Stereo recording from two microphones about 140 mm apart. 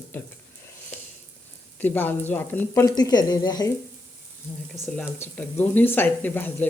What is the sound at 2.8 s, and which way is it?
Speech, 30° left (ahead or behind).